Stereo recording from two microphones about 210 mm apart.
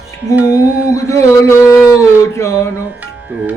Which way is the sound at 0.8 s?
15° left (ahead or behind).